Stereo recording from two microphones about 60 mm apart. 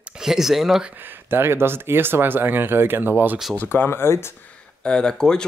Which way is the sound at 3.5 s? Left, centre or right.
Left.